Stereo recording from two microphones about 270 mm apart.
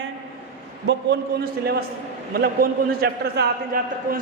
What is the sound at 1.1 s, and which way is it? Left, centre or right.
A man's voice, right.